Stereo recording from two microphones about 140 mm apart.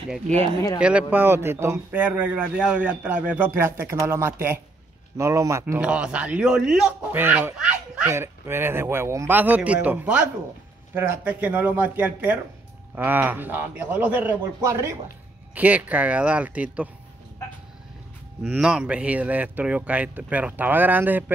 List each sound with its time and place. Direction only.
0.7 s a man's voice: 10° right (ahead or behind)
5.8 s speech: 10° right (ahead or behind)
7.5 s a sound: 5° right (ahead or behind)
8.1 s speech: 15° right (ahead or behind)
15.5 s speech: 10° right (ahead or behind)
18.5 s speech: 5° right (ahead or behind)